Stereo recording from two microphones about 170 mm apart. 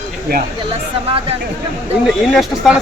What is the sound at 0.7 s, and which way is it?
Speech, 35° right (ahead or behind).